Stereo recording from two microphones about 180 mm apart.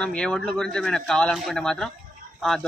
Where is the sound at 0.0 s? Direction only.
5° left (ahead or behind).